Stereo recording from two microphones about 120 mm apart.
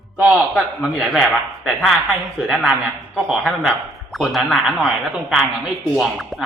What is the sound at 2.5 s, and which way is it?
A woman's voice, 5° right (ahead or behind).